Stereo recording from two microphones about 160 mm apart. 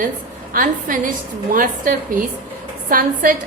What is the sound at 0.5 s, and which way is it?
A woman's voice, 55° right (ahead or behind).